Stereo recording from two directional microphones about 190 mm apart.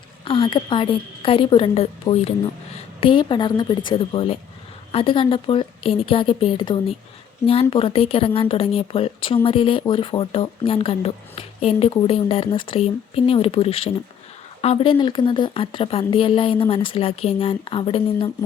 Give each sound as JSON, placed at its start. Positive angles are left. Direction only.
{"t": 0.3, "sound": "speech", "side_deg": 30}